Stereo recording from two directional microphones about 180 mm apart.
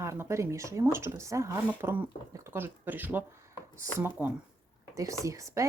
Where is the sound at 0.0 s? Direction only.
15° right (ahead or behind).